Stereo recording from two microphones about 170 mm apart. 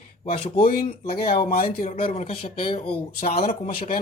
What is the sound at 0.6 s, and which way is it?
Speech, 60° left (ahead or behind).